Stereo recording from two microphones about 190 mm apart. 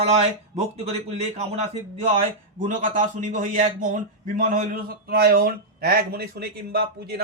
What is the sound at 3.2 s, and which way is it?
Speech, 40° right (ahead or behind).